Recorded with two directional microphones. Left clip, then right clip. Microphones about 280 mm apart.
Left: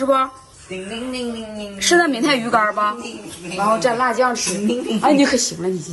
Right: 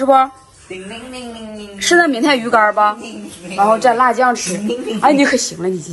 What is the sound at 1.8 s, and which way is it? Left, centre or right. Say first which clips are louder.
A woman's voice: right 3 dB; centre.